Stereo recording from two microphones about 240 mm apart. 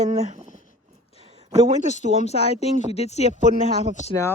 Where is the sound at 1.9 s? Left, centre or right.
Left.